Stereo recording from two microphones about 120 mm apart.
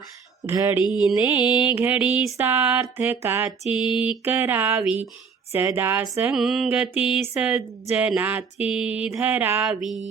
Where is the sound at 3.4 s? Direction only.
5° right (ahead or behind).